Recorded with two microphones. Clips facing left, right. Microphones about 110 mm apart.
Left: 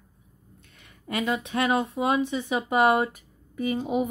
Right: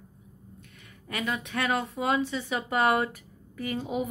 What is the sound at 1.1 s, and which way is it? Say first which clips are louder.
Speech: left 5 dB; 25° left (ahead or behind).